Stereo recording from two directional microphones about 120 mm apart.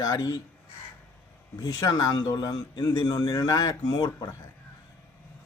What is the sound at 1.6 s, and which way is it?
Speech, 30° left (ahead or behind).